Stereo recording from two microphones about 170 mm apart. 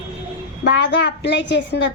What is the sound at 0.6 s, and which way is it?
A woman's voice, 90° left.